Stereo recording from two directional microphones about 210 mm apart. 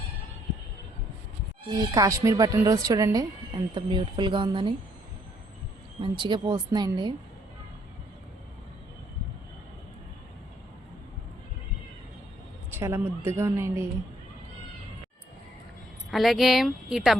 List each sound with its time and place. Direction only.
1.6 s speech: 20° right (ahead or behind)
6.0 s a woman's voice: 20° right (ahead or behind)
12.7 s speech: 10° right (ahead or behind)
16.1 s speech: centre (ahead or behind)